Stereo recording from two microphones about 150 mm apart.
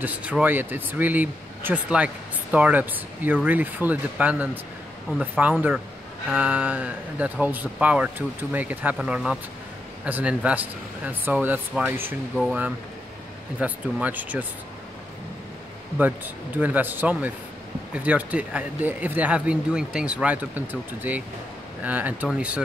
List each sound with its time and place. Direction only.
0.0 s speech: 10° right (ahead or behind)
13.6 s speech: 10° right (ahead or behind)
16.5 s speech: 10° right (ahead or behind)